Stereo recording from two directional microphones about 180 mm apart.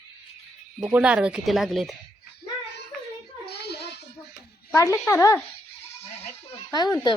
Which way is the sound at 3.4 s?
65° left (ahead or behind).